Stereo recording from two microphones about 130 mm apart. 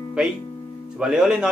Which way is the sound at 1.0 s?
5° right (ahead or behind).